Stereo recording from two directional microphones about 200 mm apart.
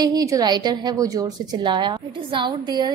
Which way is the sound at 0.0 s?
20° right (ahead or behind).